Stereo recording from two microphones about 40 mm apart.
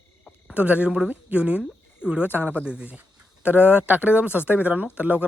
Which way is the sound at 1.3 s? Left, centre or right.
Right.